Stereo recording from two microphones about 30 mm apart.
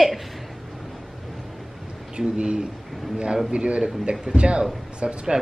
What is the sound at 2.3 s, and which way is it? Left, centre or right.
A man's voice, right.